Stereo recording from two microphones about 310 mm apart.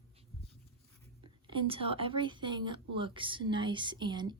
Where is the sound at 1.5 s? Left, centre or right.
Centre.